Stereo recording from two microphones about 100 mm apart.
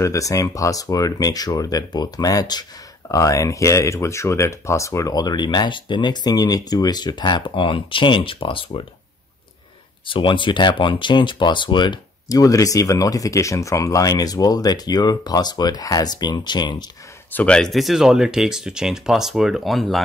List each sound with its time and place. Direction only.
0.0 s speech: 30° left (ahead or behind); by 8.8 s 60° left (ahead or behind)
10.0 s speech: 55° left (ahead or behind)
17.3 s speech: 15° left (ahead or behind)
17.6 s speech: centre (ahead or behind)